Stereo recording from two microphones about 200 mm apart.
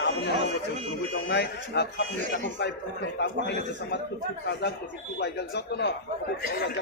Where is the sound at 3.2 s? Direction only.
55° left (ahead or behind).